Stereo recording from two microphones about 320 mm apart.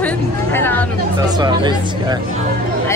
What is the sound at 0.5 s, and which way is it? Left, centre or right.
Speech, centre.